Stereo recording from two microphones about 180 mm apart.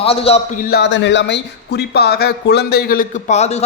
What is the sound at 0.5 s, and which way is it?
A man's voice, 65° left (ahead or behind).